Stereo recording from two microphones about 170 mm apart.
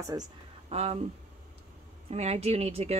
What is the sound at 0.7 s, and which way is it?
Speech, 35° right (ahead or behind).